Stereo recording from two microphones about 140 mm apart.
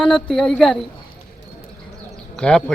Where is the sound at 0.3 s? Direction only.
5° left (ahead or behind).